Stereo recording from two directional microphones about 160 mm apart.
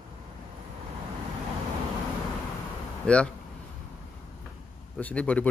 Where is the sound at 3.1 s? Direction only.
5° left (ahead or behind).